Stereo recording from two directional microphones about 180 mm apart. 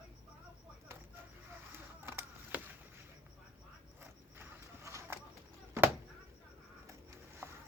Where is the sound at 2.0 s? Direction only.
10° right (ahead or behind).